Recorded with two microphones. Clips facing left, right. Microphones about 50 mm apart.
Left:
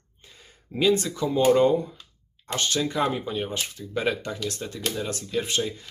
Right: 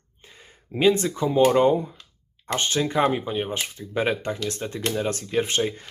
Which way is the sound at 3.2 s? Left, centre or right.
Centre.